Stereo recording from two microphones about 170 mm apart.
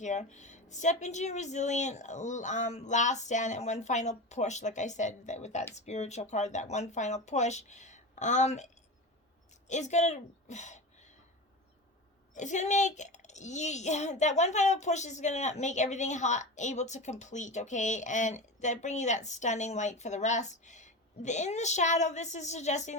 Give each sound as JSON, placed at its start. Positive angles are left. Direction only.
{"t": 0.0, "sound": "speech", "side_deg": 45}
{"t": 12.3, "sound": "speech", "side_deg": 45}